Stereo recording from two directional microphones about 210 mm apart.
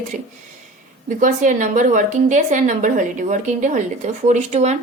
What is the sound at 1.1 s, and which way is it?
A woman's voice, 40° right (ahead or behind).